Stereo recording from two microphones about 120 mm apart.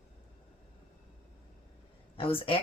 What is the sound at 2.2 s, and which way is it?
Speech, 50° left (ahead or behind).